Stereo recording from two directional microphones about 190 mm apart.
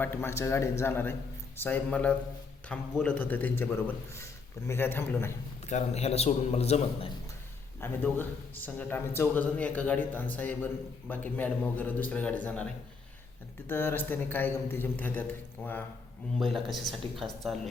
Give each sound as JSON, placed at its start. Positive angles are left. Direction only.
{"t": 0.0, "sound": "a man's voice", "side_deg": 10}
{"t": 5.6, "sound": "a man's voice", "side_deg": 35}
{"t": 7.8, "sound": "a man's voice", "side_deg": 10}
{"t": 13.7, "sound": "a man's voice", "side_deg": 10}